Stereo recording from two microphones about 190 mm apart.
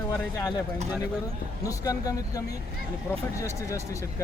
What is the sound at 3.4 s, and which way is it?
Speech, 15° left (ahead or behind).